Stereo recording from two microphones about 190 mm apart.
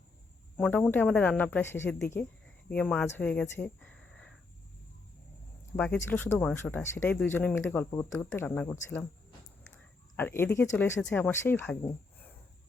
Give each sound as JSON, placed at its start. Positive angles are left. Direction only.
{"t": 0.5, "sound": "speech", "side_deg": 5}
{"t": 5.7, "sound": "speech", "side_deg": 10}
{"t": 10.2, "sound": "speech", "side_deg": 10}